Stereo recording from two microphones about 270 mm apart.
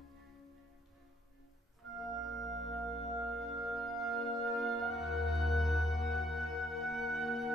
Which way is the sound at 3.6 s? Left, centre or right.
Centre.